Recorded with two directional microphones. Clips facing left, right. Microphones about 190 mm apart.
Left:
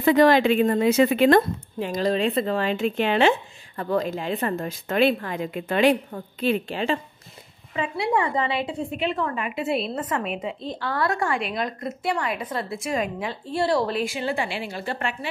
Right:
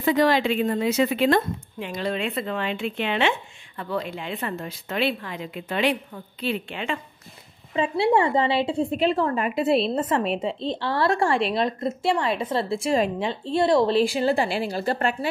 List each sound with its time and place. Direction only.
0.0 s a woman's voice: 55° left (ahead or behind); by 7.0 s 35° left (ahead or behind)
7.7 s a woman's voice: 30° right (ahead or behind)